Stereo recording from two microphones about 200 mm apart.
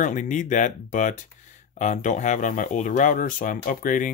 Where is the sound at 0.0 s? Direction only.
40° left (ahead or behind).